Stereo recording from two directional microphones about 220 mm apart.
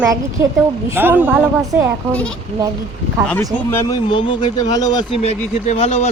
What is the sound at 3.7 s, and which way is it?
Speech, 15° left (ahead or behind).